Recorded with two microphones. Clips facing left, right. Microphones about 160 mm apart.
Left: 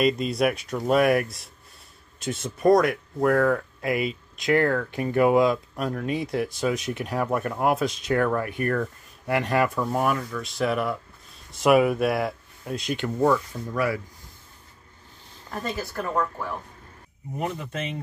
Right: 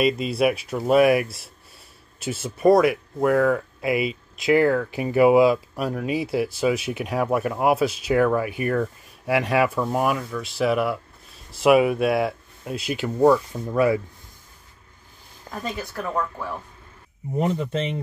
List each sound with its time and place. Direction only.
0.0 s speech: 5° right (ahead or behind)
13.3 s speech: 25° right (ahead or behind)
15.7 s speech: centre (ahead or behind)
17.4 s speech: 30° right (ahead or behind)